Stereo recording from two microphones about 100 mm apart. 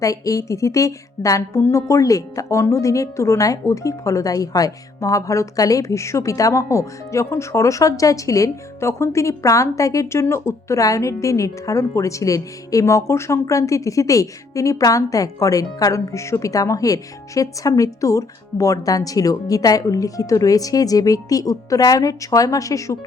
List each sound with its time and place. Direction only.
0.0 s a woman's voice: 35° left (ahead or behind)